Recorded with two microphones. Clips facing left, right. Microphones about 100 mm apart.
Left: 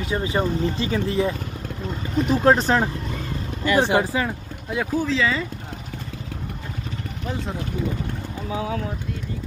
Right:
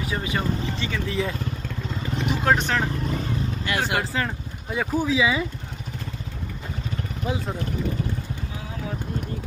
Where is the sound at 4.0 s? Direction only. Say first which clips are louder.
Left 3 dB; 15° left (ahead or behind).